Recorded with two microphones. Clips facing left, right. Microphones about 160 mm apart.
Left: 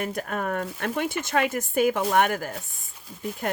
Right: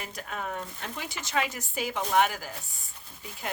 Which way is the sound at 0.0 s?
50° left (ahead or behind).